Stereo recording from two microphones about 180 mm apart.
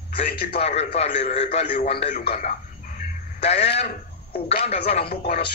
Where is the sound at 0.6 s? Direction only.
35° left (ahead or behind).